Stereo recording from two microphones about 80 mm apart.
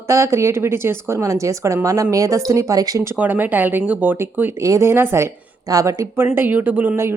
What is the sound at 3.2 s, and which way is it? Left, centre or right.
Speech, right.